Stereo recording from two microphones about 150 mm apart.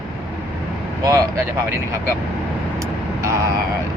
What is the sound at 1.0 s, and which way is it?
Speech, 20° right (ahead or behind).